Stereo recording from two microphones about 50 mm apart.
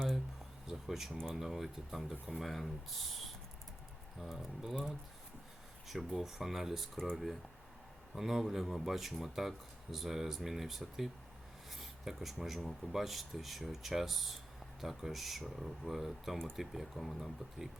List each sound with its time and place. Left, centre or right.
0.7 s a sound: centre
1.4 s speech: centre
5.9 s speech: centre
8.1 s speech: centre